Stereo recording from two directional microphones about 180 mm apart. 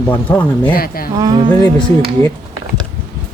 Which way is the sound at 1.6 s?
15° left (ahead or behind).